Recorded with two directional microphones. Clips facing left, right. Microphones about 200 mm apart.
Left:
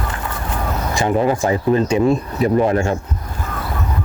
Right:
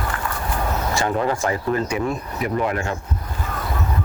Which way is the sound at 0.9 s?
20° left (ahead or behind).